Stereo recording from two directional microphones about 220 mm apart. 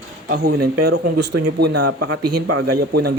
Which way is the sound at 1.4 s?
90° right.